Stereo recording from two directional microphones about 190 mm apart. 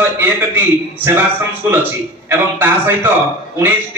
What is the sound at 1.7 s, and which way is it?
A man's voice, 10° right (ahead or behind).